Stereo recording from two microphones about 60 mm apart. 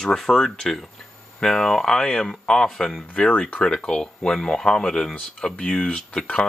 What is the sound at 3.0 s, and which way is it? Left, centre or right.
Speech, centre.